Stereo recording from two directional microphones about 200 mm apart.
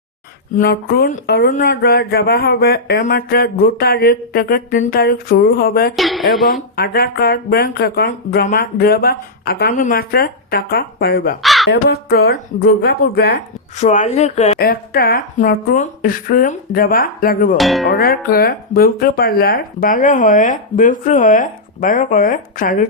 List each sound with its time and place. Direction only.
0.5 s speech: 50° left (ahead or behind)
6.0 s speech: centre (ahead or behind)
6.5 s speech: 50° left (ahead or behind)
11.4 s crow: centre (ahead or behind)
11.7 s speech: 50° left (ahead or behind)
13.7 s speech: 35° left (ahead or behind)
14.6 s speech: 50° left (ahead or behind)
17.6 s speech: centre (ahead or behind)
17.8 s speech: 50° left (ahead or behind)